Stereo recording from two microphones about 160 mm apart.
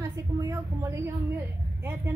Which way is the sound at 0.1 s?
20° right (ahead or behind).